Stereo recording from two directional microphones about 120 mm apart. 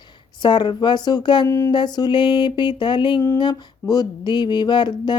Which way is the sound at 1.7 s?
35° left (ahead or behind).